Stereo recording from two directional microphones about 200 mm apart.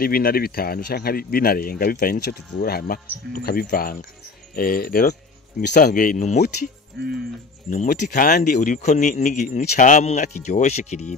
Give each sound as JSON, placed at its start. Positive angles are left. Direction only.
{"t": 0.0, "sound": "speech", "side_deg": 45}
{"t": 7.0, "sound": "speech", "side_deg": -50}
{"t": 7.7, "sound": "speech", "side_deg": 40}